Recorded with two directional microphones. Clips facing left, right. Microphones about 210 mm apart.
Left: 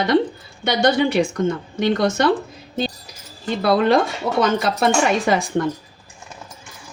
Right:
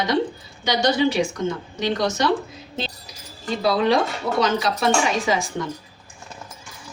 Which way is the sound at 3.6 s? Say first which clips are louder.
Left 3 dB; 55° left (ahead or behind).